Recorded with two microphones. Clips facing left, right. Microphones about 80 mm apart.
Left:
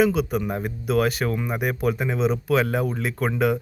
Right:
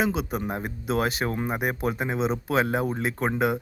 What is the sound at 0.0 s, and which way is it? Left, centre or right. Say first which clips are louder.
Speech: left 5 dB; right.